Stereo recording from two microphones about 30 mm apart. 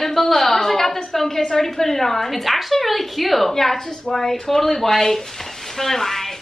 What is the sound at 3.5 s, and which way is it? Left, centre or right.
A woman's voice, centre.